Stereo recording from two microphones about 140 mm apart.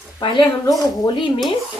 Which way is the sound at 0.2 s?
35° left (ahead or behind).